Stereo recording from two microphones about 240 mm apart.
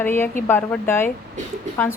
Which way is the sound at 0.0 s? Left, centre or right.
Centre.